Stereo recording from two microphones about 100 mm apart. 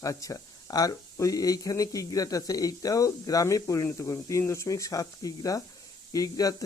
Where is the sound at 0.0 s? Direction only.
35° left (ahead or behind).